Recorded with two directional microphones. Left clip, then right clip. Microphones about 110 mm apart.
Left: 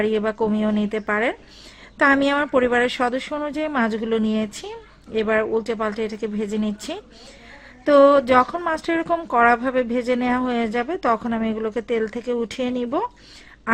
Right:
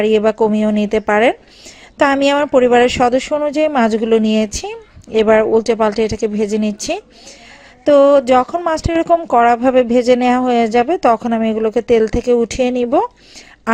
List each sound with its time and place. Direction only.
0.0 s speech: 45° right (ahead or behind)